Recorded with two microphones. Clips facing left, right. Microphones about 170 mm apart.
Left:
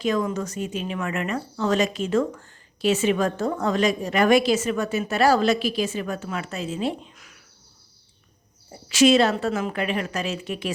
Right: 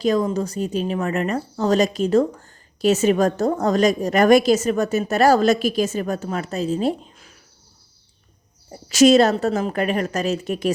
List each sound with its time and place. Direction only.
0.0 s speech: 35° right (ahead or behind)
8.7 s speech: 40° right (ahead or behind)